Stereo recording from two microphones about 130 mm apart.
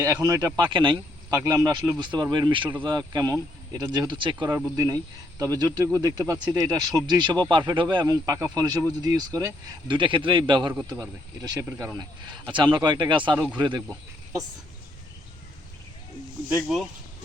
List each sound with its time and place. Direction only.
0.0 s speech: 30° right (ahead or behind)
9.8 s speech: 40° right (ahead or behind)
11.6 s speech: 15° right (ahead or behind)
12.5 s speech: 35° right (ahead or behind)
13.3 s speech: 15° right (ahead or behind)
13.6 s speech: 35° right (ahead or behind)
16.6 s speech: centre (ahead or behind)